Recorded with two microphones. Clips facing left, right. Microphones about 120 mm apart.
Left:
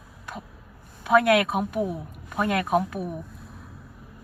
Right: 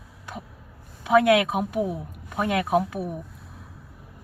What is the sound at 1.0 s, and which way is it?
Speech, 20° right (ahead or behind).